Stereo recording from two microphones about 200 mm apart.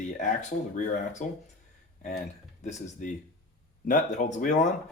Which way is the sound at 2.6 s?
35° left (ahead or behind).